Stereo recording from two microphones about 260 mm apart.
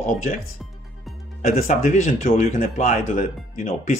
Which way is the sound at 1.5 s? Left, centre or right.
Left.